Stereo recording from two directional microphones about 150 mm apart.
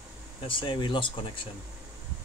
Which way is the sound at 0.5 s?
35° left (ahead or behind).